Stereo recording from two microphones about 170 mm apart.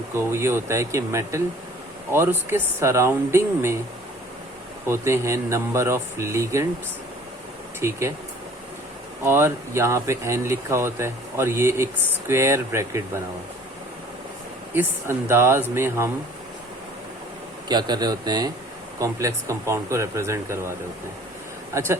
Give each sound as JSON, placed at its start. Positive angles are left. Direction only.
{"t": 0.1, "sound": "speech", "side_deg": -15}
{"t": 4.9, "sound": "speech", "side_deg": -15}
{"t": 7.8, "sound": "speech", "side_deg": -15}
{"t": 9.2, "sound": "speech", "side_deg": -15}
{"t": 14.7, "sound": "speech", "side_deg": -15}
{"t": 17.7, "sound": "a man's voice", "side_deg": -25}